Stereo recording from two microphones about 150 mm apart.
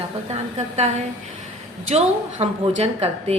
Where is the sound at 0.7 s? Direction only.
50° right (ahead or behind).